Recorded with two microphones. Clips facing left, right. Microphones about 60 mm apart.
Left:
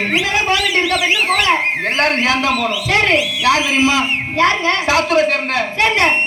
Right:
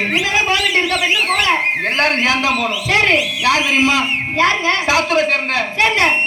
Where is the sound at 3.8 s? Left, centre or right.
Centre.